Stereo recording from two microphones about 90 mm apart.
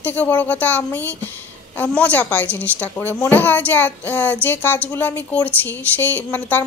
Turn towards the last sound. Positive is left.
turn(degrees=20)  # may be behind; listen again after turning